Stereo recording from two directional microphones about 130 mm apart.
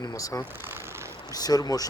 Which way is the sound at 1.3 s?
30° left (ahead or behind).